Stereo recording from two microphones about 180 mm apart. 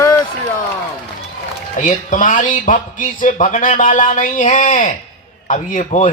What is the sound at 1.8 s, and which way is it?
Speech, 45° left (ahead or behind).